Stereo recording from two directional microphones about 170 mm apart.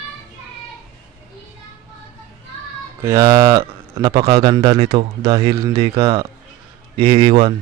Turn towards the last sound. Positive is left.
turn(degrees=-30)  # may be behind; listen again after turning